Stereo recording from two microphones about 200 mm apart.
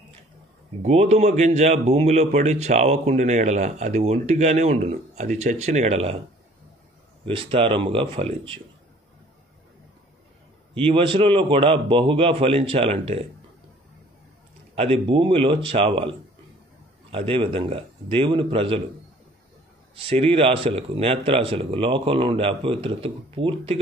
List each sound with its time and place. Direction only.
0.8 s speech: 35° right (ahead or behind)
7.2 s speech: 25° right (ahead or behind)
10.7 s speech: 25° right (ahead or behind)
14.8 s speech: 25° right (ahead or behind)
20.0 s speech: 30° right (ahead or behind)